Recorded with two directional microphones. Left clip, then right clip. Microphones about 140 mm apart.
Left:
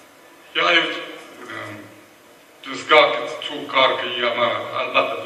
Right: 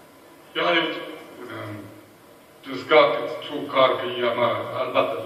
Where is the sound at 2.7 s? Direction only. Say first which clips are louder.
Left 3 dB; 25° left (ahead or behind).